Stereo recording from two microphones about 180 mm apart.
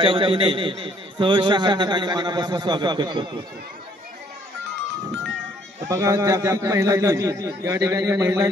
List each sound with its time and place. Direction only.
0.0 s a man's voice: 30° right (ahead or behind)
5.9 s a man's voice: 15° right (ahead or behind)